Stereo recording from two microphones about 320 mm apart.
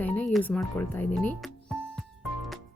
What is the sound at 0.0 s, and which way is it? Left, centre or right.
Music, centre.